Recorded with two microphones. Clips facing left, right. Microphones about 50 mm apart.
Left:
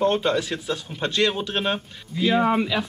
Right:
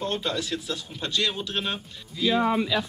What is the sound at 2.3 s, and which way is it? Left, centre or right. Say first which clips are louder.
Speech: left 3 dB; left.